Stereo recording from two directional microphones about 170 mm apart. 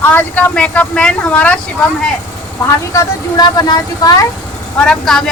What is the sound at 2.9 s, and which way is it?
Speech, 20° left (ahead or behind).